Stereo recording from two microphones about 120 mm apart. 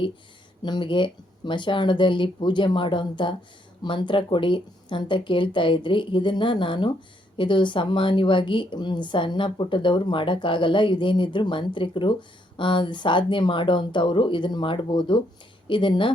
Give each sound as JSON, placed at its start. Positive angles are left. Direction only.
{"t": 0.6, "sound": "a woman's voice", "side_deg": 40}